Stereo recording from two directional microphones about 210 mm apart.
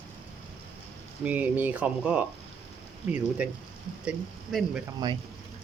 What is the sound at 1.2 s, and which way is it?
Speech, 5° right (ahead or behind).